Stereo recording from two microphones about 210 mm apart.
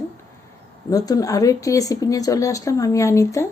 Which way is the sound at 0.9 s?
15° left (ahead or behind).